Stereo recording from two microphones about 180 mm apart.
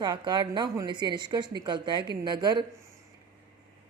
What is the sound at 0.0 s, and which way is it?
Speech, 25° right (ahead or behind).